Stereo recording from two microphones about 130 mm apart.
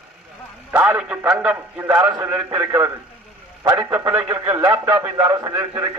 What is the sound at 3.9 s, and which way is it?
Speech, 25° right (ahead or behind).